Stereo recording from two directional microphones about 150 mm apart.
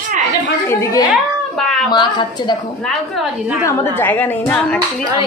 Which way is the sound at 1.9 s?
30° left (ahead or behind).